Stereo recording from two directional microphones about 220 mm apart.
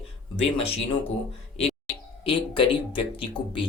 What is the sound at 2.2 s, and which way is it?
Speech, 25° left (ahead or behind).